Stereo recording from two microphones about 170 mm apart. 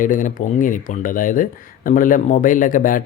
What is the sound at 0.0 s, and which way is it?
Speech, 50° left (ahead or behind).